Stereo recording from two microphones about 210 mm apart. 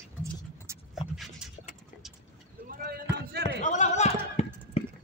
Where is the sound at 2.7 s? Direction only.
50° right (ahead or behind).